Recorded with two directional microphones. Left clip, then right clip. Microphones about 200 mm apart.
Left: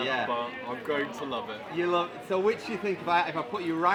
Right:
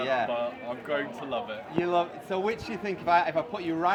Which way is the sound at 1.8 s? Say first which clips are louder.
Even; centre (ahead or behind).